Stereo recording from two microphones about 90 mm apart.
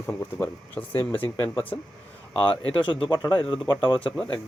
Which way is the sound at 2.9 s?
60° left (ahead or behind).